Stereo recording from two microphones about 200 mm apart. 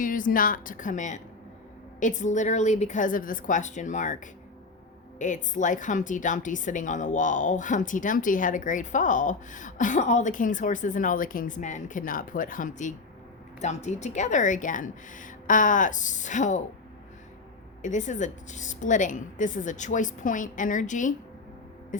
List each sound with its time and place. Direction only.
0.0 s a woman's voice: 40° left (ahead or behind)
17.8 s a woman's voice: 35° left (ahead or behind)